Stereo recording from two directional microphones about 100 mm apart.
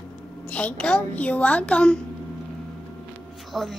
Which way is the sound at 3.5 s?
5° right (ahead or behind).